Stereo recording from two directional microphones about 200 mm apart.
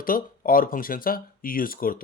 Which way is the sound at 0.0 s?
45° left (ahead or behind).